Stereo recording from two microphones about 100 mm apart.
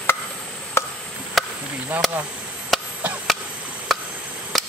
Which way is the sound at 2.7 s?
Centre (ahead or behind).